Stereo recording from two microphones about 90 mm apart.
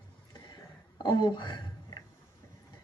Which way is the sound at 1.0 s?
55° left (ahead or behind).